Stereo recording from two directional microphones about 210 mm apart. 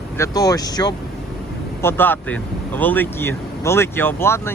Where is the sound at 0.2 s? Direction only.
15° left (ahead or behind).